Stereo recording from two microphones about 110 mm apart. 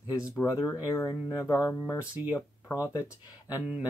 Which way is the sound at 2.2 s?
20° right (ahead or behind).